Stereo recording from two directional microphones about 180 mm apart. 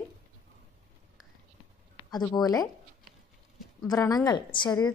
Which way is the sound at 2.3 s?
20° left (ahead or behind).